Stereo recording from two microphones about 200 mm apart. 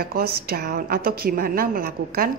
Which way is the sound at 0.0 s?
50° right (ahead or behind).